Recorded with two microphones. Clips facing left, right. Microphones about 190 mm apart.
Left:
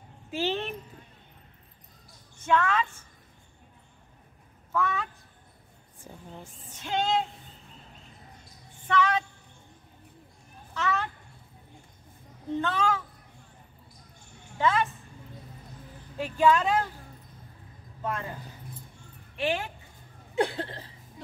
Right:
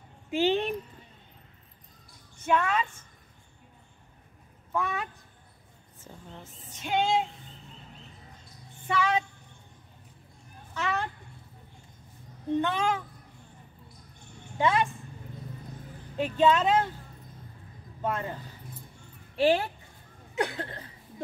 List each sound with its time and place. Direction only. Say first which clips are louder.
0.3 s a woman's voice: right 4 dB; 15° right (ahead or behind)
2.4 s a woman's voice: left 1 dB; 10° right (ahead or behind)
4.7 s a woman's voice: left 2 dB; 15° right (ahead or behind)
6.0 s speech: left 2 dB; 10° left (ahead or behind)
6.8 s a woman's voice: right 1 dB; 10° right (ahead or behind)
8.8 s speech: left 1 dB; 10° right (ahead or behind)
10.7 s a sound: left 1 dB; 15° right (ahead or behind)
12.5 s a woman's voice: even; 15° right (ahead or behind)
14.6 s a woman's voice: even; 15° right (ahead or behind)
16.2 s a woman's voice: even; 20° right (ahead or behind)
19.3 s speech: right 6 dB; 35° right (ahead or behind)
20.3 s a sound: left 3 dB; 30° left (ahead or behind)